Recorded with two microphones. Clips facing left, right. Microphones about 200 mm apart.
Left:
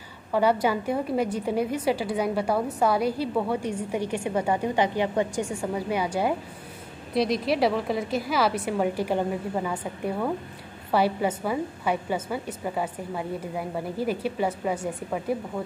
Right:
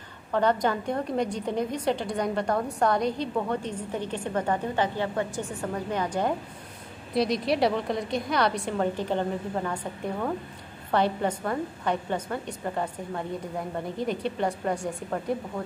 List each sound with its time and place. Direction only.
0.3 s a woman's voice: 10° left (ahead or behind)